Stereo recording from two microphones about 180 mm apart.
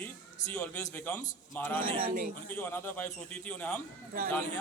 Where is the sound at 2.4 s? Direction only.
10° left (ahead or behind).